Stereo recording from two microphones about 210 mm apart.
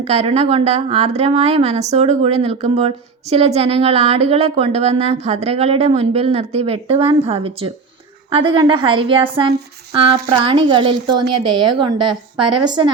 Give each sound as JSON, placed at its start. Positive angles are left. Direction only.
{"t": 0.0, "sound": "a woman's voice", "side_deg": -30}